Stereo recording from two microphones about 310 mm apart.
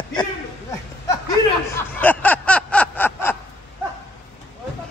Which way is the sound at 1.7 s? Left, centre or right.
Centre.